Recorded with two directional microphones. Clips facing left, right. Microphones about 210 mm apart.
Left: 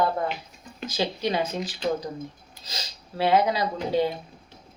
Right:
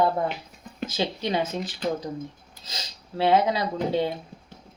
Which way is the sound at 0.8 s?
20° right (ahead or behind).